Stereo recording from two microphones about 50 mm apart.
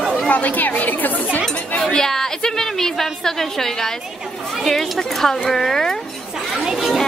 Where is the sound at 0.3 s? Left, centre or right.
Left.